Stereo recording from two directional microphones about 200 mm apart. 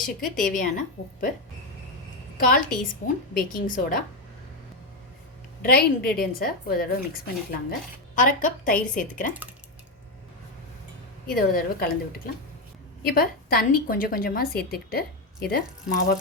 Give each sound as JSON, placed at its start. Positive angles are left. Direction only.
{"t": 0.0, "sound": "a woman's voice", "side_deg": 40}
{"t": 2.4, "sound": "a woman's voice", "side_deg": 45}
{"t": 5.6, "sound": "a woman's voice", "side_deg": 50}
{"t": 11.3, "sound": "a woman's voice", "side_deg": 45}